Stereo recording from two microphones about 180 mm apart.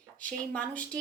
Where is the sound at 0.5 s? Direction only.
5° left (ahead or behind).